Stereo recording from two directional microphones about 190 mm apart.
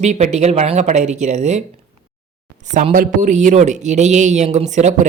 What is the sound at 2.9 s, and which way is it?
A man's voice, 45° right (ahead or behind).